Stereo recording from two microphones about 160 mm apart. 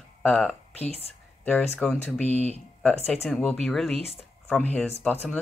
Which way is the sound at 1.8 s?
5° left (ahead or behind).